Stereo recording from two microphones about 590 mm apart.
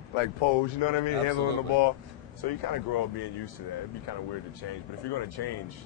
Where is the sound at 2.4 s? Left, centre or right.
Left.